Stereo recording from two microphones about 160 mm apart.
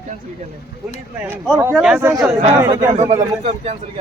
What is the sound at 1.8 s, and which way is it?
Speech, 5° right (ahead or behind).